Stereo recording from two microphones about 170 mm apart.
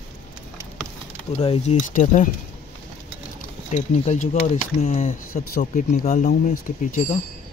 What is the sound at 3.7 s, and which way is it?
Speech, 45° left (ahead or behind).